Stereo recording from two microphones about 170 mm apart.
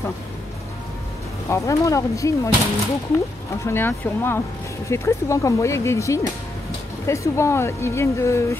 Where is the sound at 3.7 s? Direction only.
15° left (ahead or behind).